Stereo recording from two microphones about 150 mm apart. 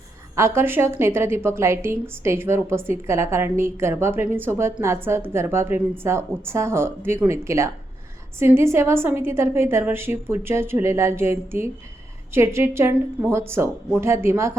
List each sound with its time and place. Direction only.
0.3 s a woman's voice: 15° right (ahead or behind)